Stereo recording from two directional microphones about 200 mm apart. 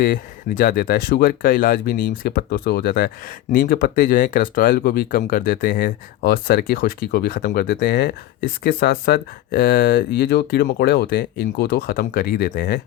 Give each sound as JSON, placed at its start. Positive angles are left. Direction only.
{"t": 0.0, "sound": "speech", "side_deg": 45}